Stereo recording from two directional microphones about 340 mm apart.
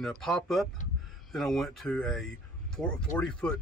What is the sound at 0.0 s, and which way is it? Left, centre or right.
Speech, centre.